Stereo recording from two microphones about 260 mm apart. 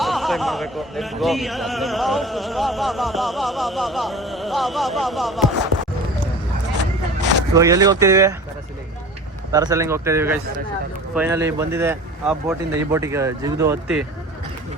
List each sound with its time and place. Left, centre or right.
0.0 s music: centre
7.2 s a sound: right
7.5 s speech: centre
9.5 s speech: centre